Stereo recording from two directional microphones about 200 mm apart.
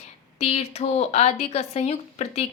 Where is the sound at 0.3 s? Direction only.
30° left (ahead or behind).